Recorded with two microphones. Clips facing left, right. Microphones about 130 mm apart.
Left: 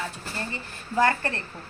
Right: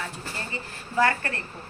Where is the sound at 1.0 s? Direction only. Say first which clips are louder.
Left 1 dB; 25° left (ahead or behind).